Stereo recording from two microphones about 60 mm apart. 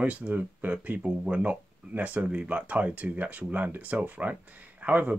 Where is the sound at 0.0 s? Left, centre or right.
Right.